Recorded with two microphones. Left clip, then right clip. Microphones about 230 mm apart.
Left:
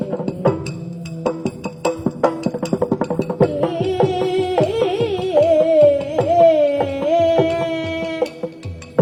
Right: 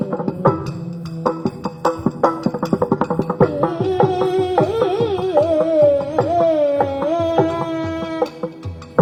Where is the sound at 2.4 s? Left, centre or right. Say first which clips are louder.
Right 1 dB; right.